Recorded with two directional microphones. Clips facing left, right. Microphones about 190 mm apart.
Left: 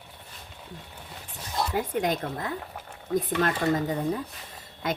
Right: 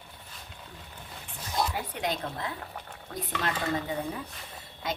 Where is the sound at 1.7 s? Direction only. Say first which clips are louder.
Left 6 dB; 45° left (ahead or behind).